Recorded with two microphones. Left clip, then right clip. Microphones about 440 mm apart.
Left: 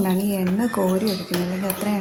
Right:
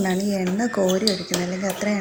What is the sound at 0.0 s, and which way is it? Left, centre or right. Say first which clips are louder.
A woman's voice: even; left.